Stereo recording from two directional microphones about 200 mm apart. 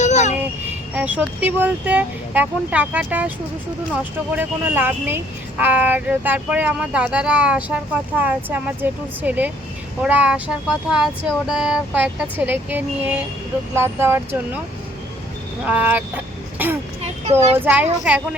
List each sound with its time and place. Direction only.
0.0 s vehicle: 35° left (ahead or behind)
0.9 s speech: 5° right (ahead or behind)
4.4 s speech: 10° right (ahead or behind)
15.6 s speech: 10° right (ahead or behind)